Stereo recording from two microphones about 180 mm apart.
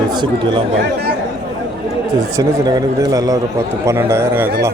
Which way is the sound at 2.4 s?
20° right (ahead or behind).